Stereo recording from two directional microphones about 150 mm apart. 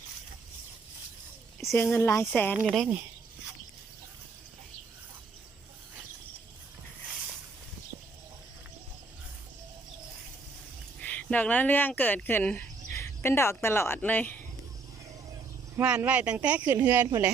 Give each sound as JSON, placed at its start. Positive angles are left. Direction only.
{"t": 1.7, "sound": "speech", "side_deg": 15}
{"t": 11.0, "sound": "speech", "side_deg": 10}
{"t": 15.7, "sound": "speech", "side_deg": -10}